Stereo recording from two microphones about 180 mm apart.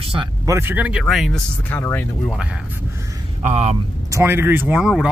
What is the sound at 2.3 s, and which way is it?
Speech, 5° right (ahead or behind).